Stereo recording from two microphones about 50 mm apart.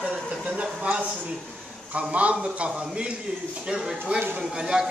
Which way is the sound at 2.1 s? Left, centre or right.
Right.